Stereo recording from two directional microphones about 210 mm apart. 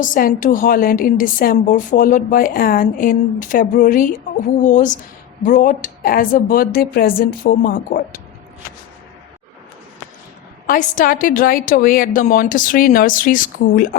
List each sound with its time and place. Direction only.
0.0 s a woman's voice: 40° left (ahead or behind)
10.7 s a woman's voice: 40° left (ahead or behind)